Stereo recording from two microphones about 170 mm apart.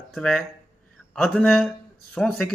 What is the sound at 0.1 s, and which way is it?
Speech, centre (ahead or behind).